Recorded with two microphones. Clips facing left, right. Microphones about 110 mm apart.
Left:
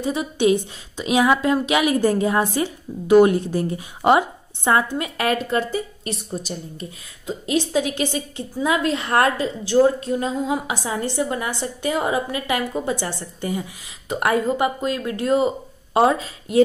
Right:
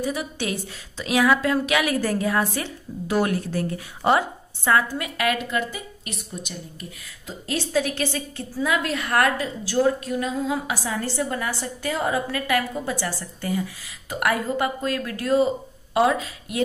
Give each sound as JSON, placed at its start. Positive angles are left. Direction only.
{"t": 0.0, "sound": "a woman's voice", "side_deg": 20}
{"t": 7.2, "sound": "a woman's voice", "side_deg": 20}